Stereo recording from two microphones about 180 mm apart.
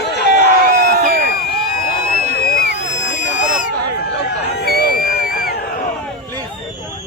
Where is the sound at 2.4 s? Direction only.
55° left (ahead or behind).